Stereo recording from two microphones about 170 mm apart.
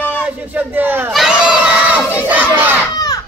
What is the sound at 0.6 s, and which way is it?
Speech, 10° right (ahead or behind).